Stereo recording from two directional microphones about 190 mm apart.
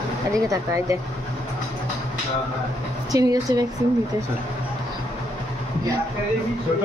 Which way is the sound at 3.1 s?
20° right (ahead or behind).